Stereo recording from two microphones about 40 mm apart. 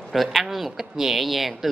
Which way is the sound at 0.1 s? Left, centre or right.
Centre.